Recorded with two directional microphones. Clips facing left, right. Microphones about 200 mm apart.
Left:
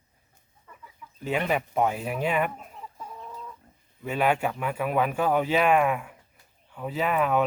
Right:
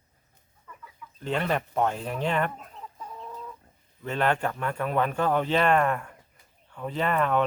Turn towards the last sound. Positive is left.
turn(degrees=5)  # may be behind; listen again after turning